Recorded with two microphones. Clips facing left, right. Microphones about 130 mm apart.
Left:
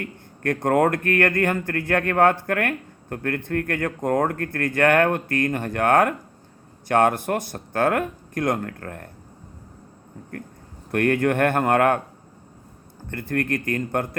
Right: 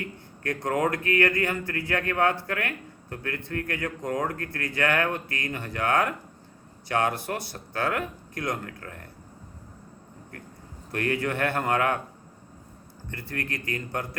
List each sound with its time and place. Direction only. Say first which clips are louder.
0.0 s speech: left 6 dB; 55° left (ahead or behind)
10.9 s speech: left 7 dB; 55° left (ahead or behind)
13.1 s speech: left 9 dB; 50° left (ahead or behind)